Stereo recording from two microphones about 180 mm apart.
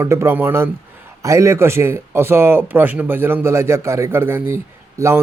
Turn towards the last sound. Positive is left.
turn(degrees=-15)  # may be behind; listen again after turning